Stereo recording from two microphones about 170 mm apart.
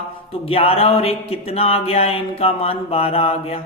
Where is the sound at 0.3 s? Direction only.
35° left (ahead or behind).